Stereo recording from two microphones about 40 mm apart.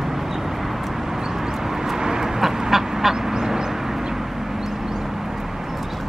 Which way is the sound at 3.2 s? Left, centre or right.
Centre.